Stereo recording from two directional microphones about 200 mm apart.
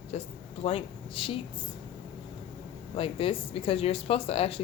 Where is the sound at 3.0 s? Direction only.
30° left (ahead or behind).